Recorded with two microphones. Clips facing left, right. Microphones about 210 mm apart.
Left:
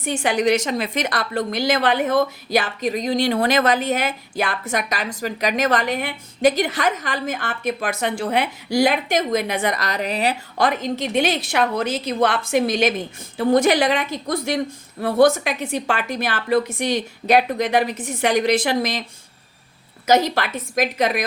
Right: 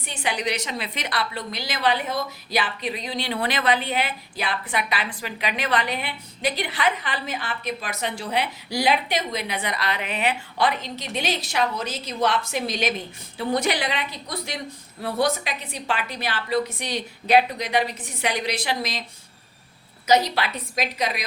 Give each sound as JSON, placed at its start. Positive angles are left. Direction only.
{"t": 0.0, "sound": "a woman's voice", "side_deg": 45}
{"t": 20.1, "sound": "a woman's voice", "side_deg": 50}